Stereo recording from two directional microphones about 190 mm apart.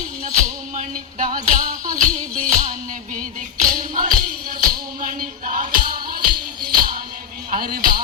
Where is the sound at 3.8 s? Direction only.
45° right (ahead or behind).